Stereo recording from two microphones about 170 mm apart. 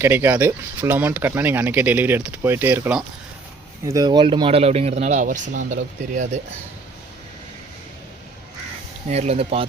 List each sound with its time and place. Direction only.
0.0 s speech: 15° right (ahead or behind)
3.8 s speech: 20° right (ahead or behind); by 6.2 s 45° right (ahead or behind)
9.0 s speech: 40° right (ahead or behind)